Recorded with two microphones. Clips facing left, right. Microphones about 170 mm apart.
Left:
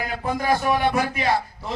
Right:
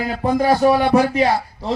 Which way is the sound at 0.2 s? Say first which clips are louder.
Right 8 dB; 35° right (ahead or behind).